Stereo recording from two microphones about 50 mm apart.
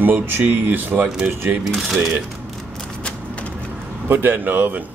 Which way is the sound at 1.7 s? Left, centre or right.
Centre.